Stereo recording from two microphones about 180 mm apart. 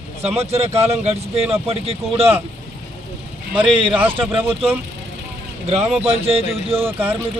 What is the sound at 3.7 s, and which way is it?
Speech, 30° right (ahead or behind).